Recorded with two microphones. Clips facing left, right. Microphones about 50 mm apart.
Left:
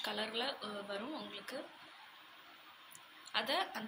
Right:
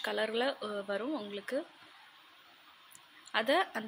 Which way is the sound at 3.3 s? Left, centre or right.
Right.